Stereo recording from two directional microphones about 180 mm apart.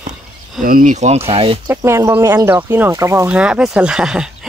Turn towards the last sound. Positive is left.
turn(degrees=-5)  # may be behind; listen again after turning